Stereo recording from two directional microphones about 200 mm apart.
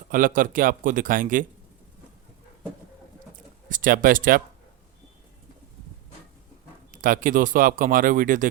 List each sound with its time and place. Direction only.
0.1 s speech: 40° right (ahead or behind)
3.7 s speech: 45° right (ahead or behind)
6.9 s speech: 45° right (ahead or behind)